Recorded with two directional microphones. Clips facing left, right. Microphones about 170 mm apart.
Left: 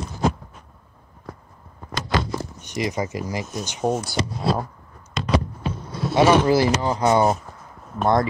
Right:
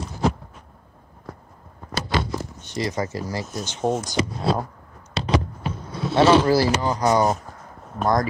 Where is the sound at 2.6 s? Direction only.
15° left (ahead or behind).